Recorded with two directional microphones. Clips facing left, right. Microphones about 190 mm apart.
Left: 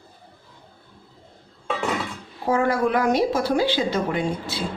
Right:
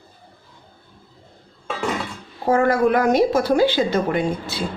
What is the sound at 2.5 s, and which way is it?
A woman's voice, 50° right (ahead or behind).